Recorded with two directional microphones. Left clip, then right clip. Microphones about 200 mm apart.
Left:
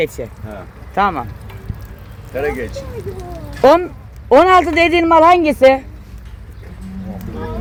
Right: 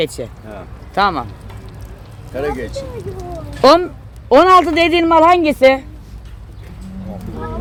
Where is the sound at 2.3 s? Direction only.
25° left (ahead or behind).